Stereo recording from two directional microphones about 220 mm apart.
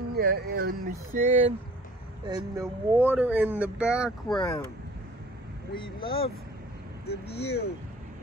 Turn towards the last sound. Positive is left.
turn(degrees=50)  # may be behind; listen again after turning